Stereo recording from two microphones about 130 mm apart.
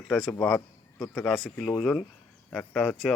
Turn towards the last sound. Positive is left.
turn(degrees=5)  # may be behind; listen again after turning